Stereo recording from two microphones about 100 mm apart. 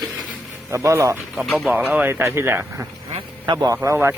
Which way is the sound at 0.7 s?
30° right (ahead or behind).